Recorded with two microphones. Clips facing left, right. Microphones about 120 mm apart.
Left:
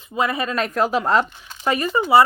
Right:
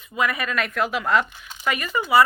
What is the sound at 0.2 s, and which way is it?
Speech, 30° left (ahead or behind).